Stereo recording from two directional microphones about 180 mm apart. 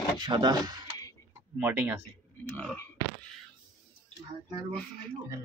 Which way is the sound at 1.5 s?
10° right (ahead or behind).